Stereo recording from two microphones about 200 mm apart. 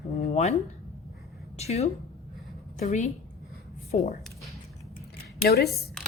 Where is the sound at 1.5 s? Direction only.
30° left (ahead or behind).